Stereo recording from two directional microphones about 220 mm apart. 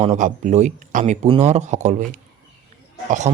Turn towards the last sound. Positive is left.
turn(degrees=-35)  # may be behind; listen again after turning